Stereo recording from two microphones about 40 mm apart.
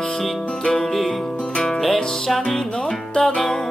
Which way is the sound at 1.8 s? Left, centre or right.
Centre.